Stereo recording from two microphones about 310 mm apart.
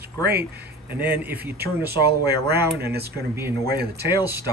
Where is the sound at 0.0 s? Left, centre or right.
Right.